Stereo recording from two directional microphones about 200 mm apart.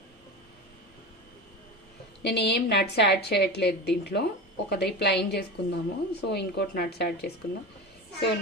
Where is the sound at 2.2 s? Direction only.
55° left (ahead or behind).